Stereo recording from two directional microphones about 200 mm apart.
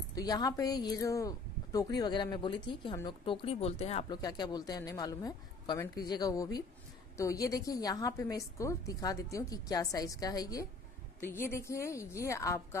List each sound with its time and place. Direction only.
0.1 s speech: 20° left (ahead or behind)
4.2 s a woman's voice: 20° left (ahead or behind)